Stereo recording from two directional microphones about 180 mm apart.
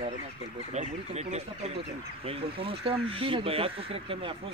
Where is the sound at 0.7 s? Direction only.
40° right (ahead or behind).